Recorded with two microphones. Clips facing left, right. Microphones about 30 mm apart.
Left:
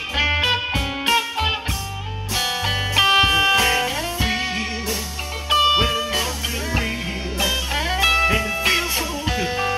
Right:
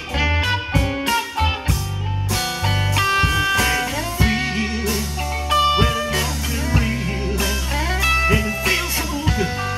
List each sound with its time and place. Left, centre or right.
0.1 s music: centre
7.4 s music: centre